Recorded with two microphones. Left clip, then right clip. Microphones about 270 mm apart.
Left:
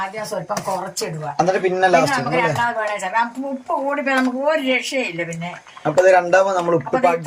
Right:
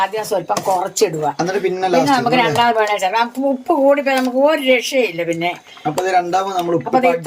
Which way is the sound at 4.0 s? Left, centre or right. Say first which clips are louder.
Right 5 dB; right.